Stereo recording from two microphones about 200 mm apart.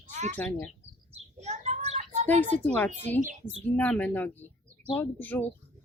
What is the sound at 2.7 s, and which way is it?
Speech, 10° left (ahead or behind).